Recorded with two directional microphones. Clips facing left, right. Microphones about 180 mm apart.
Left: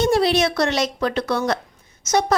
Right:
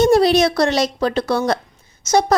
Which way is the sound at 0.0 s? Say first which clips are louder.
Right 5 dB; 40° right (ahead or behind).